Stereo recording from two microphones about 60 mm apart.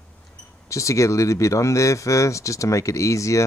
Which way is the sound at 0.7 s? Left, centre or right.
Left.